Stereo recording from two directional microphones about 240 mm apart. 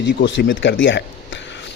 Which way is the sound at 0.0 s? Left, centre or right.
Left.